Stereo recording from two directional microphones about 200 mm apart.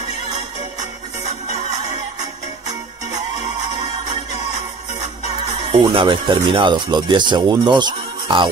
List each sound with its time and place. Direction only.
5.7 s speech: 25° right (ahead or behind)